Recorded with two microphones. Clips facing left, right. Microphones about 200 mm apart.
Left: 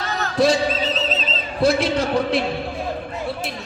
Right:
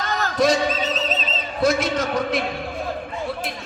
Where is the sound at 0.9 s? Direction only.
40° right (ahead or behind).